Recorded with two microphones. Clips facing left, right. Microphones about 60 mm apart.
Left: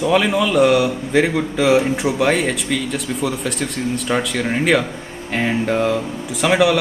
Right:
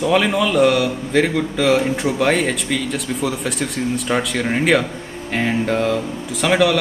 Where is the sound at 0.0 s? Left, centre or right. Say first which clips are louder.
Even; centre.